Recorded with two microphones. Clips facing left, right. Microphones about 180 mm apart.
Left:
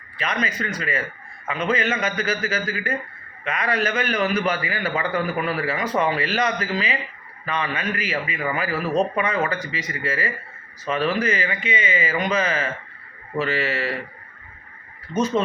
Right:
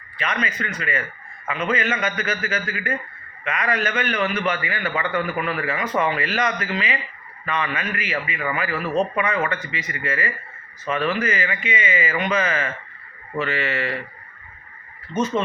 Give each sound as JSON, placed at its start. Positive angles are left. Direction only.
{"t": 0.2, "sound": "a man's voice", "side_deg": 35}